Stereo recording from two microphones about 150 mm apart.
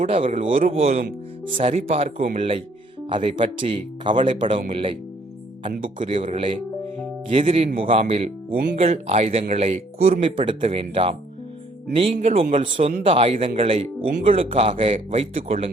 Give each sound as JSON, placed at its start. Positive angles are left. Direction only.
{"t": 0.0, "sound": "speech", "side_deg": -40}
{"t": 6.0, "sound": "speech", "side_deg": -35}
{"t": 8.5, "sound": "speech", "side_deg": -60}
{"t": 8.9, "sound": "speech", "side_deg": -45}
{"t": 14.0, "sound": "speech", "side_deg": -60}
{"t": 14.3, "sound": "speech", "side_deg": -40}